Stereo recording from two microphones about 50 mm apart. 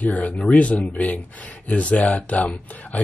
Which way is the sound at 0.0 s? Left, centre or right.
Left.